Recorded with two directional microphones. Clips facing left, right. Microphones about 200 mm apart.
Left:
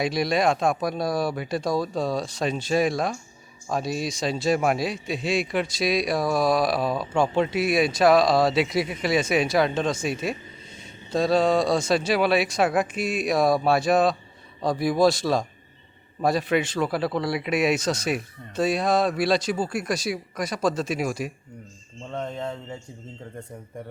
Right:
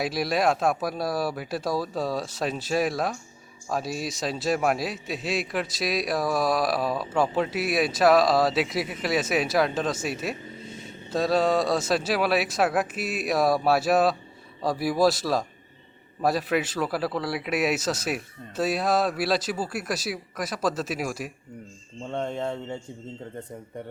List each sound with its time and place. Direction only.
0.0 s a man's voice: 5° right (ahead or behind)
22.1 s speech: 25° right (ahead or behind)